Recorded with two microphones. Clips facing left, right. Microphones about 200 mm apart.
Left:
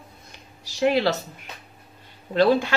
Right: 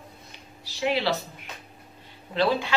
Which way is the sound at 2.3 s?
50° left (ahead or behind).